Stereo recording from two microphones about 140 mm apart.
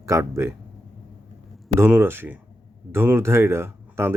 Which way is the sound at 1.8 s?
15° right (ahead or behind).